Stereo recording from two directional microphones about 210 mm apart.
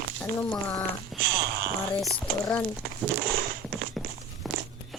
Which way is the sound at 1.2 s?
50° right (ahead or behind).